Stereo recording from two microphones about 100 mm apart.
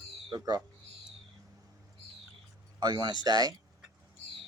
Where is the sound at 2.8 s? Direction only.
45° right (ahead or behind).